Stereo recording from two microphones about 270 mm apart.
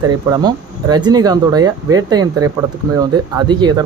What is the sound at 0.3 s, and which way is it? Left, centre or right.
Speech, centre.